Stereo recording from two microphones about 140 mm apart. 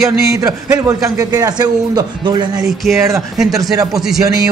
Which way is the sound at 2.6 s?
Centre (ahead or behind).